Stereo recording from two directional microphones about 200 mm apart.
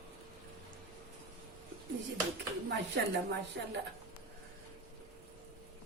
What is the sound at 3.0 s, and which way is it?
Speech, 55° right (ahead or behind).